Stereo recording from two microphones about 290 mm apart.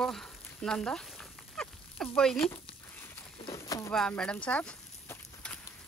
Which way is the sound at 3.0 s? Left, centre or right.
Centre.